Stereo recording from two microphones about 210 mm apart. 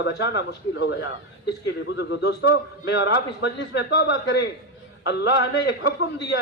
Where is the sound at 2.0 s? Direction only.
55° left (ahead or behind).